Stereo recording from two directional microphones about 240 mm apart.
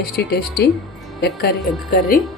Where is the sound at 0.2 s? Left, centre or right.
Left.